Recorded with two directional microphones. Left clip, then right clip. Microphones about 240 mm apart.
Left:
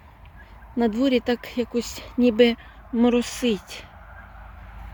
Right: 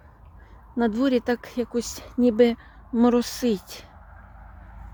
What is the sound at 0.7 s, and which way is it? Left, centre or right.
Speech, centre.